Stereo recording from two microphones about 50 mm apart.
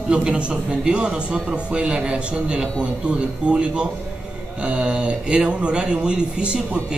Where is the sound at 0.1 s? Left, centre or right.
Right.